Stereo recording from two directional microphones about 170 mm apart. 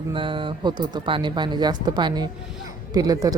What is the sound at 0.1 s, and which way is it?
Speech, 30° right (ahead or behind).